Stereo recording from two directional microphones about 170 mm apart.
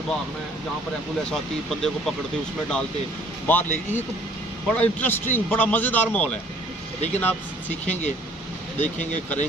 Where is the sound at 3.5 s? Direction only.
10° left (ahead or behind).